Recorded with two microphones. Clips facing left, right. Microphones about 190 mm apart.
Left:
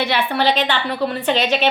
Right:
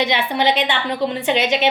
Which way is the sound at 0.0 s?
15° right (ahead or behind).